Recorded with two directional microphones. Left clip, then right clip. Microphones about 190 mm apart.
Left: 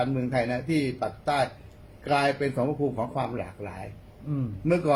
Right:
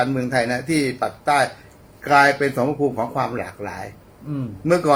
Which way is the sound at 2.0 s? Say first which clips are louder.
Right 10 dB; 15° right (ahead or behind).